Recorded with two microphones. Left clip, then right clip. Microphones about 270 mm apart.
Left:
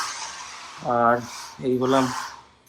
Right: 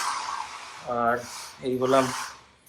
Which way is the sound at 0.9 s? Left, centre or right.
Left.